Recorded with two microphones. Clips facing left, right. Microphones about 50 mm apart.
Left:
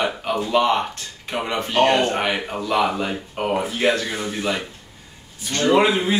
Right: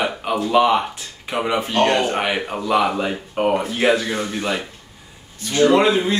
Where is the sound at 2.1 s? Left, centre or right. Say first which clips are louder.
Right 1 dB; centre.